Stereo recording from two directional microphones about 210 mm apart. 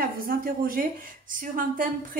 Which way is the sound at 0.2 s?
45° right (ahead or behind).